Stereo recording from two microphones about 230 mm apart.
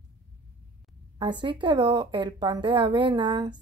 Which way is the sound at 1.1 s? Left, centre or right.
Right.